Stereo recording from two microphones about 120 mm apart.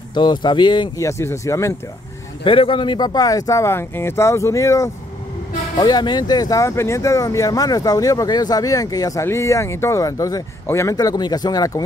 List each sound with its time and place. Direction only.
0.1 s speech: 40° left (ahead or behind)
0.9 s speech: 25° left (ahead or behind)
2.4 s speech: 45° left (ahead or behind); by 11.8 s 30° left (ahead or behind)